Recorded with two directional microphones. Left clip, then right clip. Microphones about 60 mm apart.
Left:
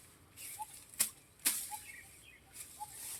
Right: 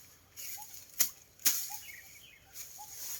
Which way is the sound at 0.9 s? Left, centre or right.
Right.